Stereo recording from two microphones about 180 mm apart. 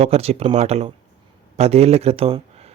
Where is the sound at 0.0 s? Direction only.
35° right (ahead or behind).